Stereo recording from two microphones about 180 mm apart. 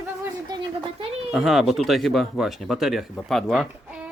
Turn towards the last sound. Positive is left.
turn(degrees=0)  # may be behind; listen again after turning